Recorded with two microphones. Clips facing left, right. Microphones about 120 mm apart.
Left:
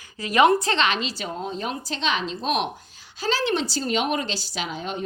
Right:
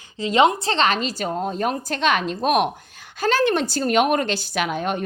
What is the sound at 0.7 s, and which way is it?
A woman's voice, 40° right (ahead or behind).